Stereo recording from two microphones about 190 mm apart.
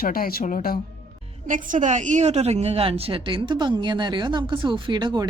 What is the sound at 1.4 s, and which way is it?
A woman's voice, 40° right (ahead or behind).